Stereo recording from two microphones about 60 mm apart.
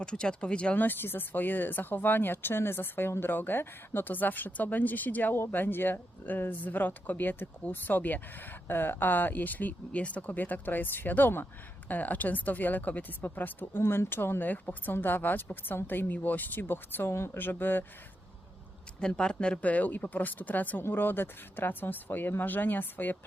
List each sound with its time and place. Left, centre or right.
0.0 s speech: centre
0.8 s speech: left
18.9 s speech: centre; by 23.1 s left